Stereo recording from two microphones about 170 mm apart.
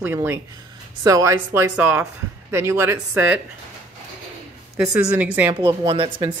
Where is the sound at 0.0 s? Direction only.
15° right (ahead or behind).